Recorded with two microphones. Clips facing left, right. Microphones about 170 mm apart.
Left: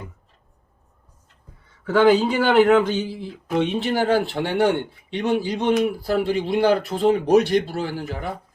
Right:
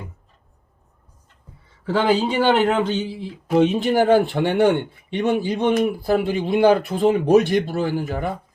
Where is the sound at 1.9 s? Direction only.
30° right (ahead or behind).